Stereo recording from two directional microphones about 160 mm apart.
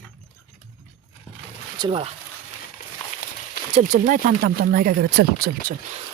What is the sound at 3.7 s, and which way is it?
Speech, 50° right (ahead or behind).